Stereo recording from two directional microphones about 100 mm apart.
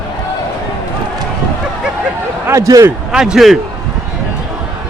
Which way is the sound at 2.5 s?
30° right (ahead or behind).